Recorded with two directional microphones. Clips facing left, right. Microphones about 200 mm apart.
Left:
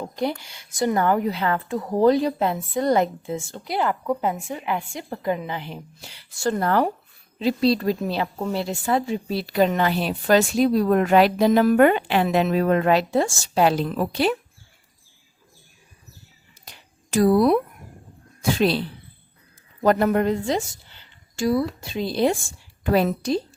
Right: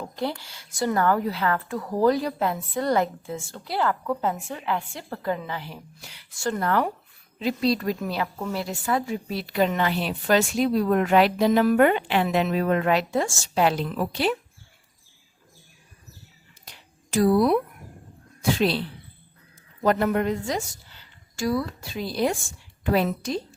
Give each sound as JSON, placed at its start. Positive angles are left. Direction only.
{"t": 0.0, "sound": "a woman's voice", "side_deg": 15}
{"t": 17.1, "sound": "a woman's voice", "side_deg": 45}
{"t": 19.8, "sound": "a woman's voice", "side_deg": 40}
{"t": 22.8, "sound": "a woman's voice", "side_deg": 45}